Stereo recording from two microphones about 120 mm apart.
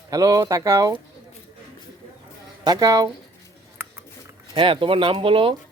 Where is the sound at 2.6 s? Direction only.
30° right (ahead or behind).